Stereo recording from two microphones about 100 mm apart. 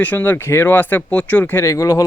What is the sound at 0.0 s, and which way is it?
Speech, 20° left (ahead or behind).